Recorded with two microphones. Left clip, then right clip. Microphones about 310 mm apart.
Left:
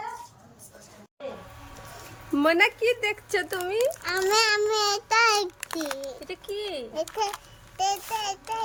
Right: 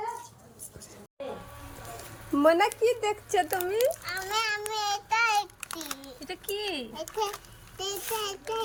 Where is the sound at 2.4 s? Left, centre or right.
Centre.